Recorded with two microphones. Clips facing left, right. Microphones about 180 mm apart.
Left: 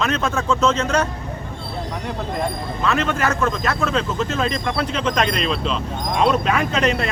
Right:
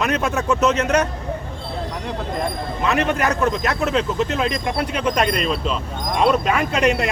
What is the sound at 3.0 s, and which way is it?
Speech, 15° right (ahead or behind).